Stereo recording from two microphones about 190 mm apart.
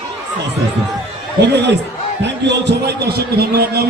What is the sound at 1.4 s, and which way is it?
A man's voice, 65° right (ahead or behind).